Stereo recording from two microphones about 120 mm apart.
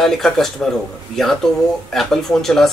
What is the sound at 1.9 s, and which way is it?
Speech, 5° left (ahead or behind).